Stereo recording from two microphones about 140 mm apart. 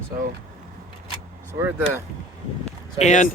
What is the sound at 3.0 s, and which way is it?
Speech, 60° left (ahead or behind).